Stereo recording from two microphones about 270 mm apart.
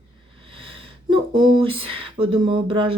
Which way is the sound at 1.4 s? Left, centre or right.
Centre.